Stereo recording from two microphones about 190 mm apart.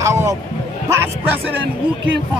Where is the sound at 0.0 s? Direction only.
15° right (ahead or behind).